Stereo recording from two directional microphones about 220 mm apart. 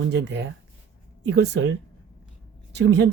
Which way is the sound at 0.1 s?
50° right (ahead or behind).